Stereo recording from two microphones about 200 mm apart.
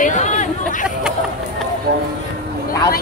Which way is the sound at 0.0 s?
35° left (ahead or behind).